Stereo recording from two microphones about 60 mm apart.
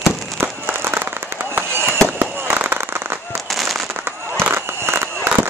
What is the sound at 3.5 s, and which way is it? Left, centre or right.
Fireworks, centre.